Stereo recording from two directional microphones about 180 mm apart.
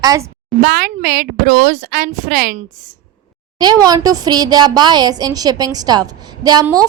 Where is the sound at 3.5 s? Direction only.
25° right (ahead or behind).